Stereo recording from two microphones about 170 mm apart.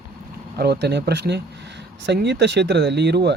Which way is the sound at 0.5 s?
70° right (ahead or behind).